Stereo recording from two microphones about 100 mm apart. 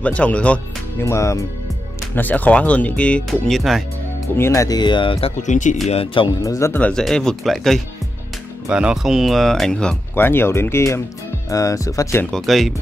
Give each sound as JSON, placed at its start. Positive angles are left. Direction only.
{"t": 0.0, "sound": "speech", "side_deg": 10}
{"t": 0.9, "sound": "speech", "side_deg": 30}
{"t": 2.1, "sound": "speech", "side_deg": 15}
{"t": 3.3, "sound": "speech", "side_deg": 0}
{"t": 4.4, "sound": "speech", "side_deg": 30}
{"t": 6.4, "sound": "speech", "side_deg": 35}
{"t": 6.7, "sound": "speech", "side_deg": 10}
{"t": 8.6, "sound": "speech", "side_deg": -5}
{"t": 10.1, "sound": "speech", "side_deg": 20}
{"t": 12.3, "sound": "speech", "side_deg": 0}